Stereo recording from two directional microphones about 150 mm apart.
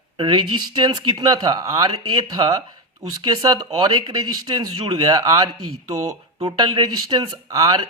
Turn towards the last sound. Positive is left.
turn(degrees=-25)  # may be behind; listen again after turning